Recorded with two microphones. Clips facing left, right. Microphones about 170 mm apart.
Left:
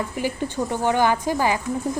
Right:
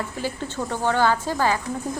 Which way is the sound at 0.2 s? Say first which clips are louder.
Left 4 dB; 15° left (ahead or behind).